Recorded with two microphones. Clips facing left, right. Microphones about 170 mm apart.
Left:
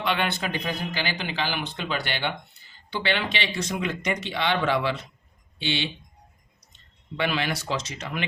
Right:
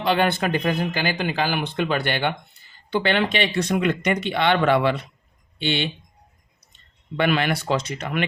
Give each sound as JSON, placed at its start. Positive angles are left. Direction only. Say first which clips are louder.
{"t": 0.0, "sound": "speech", "louder": "right 6 dB", "side_deg": -40}
{"t": 7.2, "sound": "speech", "louder": "right 6 dB", "side_deg": -55}